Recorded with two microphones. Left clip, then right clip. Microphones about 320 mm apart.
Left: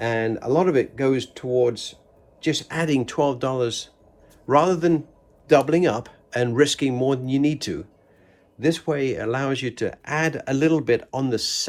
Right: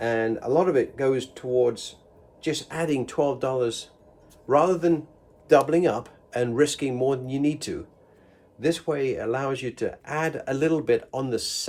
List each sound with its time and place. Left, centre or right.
0.0 s speech: left